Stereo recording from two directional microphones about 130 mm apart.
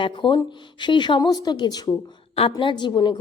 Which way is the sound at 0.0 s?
40° left (ahead or behind).